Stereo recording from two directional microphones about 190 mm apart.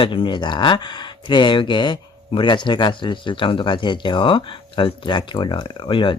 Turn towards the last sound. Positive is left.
turn(degrees=25)  # may be behind; listen again after turning